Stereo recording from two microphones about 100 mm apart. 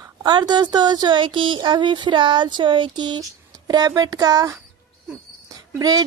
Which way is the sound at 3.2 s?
40° right (ahead or behind).